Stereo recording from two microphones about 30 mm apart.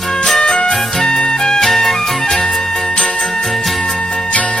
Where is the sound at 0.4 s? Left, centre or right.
Left.